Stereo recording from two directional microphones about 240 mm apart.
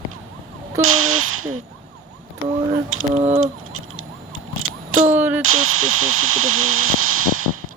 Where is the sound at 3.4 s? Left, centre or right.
Right.